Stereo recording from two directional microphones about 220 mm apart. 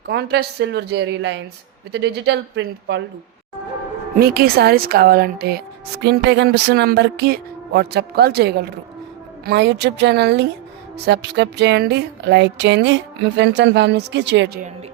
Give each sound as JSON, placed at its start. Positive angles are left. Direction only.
{"t": 0.1, "sound": "speech", "side_deg": -50}
{"t": 4.2, "sound": "speech", "side_deg": -45}